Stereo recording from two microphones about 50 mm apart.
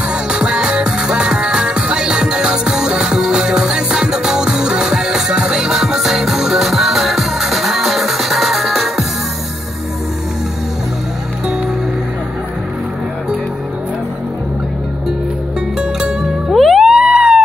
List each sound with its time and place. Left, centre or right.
0.1 s music: centre
15.8 s zither: centre
16.8 s a sound: centre